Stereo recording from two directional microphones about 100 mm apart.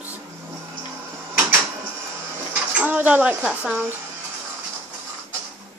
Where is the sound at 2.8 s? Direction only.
15° right (ahead or behind).